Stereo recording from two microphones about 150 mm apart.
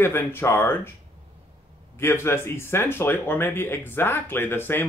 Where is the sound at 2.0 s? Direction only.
15° left (ahead or behind).